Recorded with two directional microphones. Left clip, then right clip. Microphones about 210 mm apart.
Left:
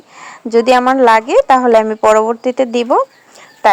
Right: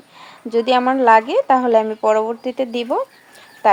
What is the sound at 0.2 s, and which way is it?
A woman's voice, 30° left (ahead or behind).